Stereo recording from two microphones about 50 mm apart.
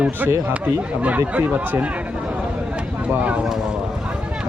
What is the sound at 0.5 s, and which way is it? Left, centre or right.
A man's voice, right.